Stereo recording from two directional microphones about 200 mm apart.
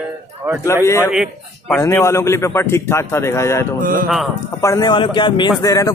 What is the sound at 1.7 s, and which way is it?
A man's voice, 10° left (ahead or behind).